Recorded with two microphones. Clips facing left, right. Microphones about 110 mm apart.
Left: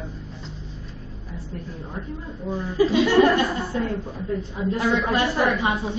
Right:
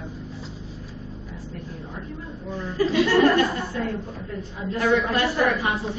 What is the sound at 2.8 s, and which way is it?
A woman's voice, 15° left (ahead or behind).